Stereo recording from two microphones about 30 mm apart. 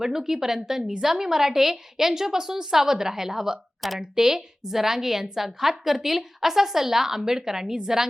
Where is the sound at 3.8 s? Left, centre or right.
Centre.